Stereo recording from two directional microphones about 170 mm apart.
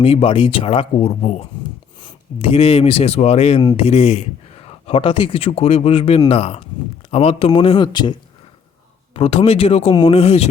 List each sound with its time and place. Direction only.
0.0 s speech: 35° left (ahead or behind)
3.6 s speech: 25° left (ahead or behind)
3.8 s speech: 35° left (ahead or behind)